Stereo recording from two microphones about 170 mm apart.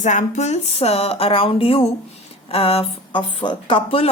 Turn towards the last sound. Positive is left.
turn(degrees=35)  # may be behind; listen again after turning